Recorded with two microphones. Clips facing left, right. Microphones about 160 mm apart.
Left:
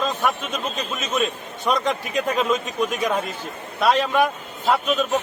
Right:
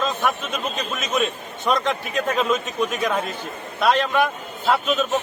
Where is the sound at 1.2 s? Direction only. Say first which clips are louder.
Even; centre (ahead or behind).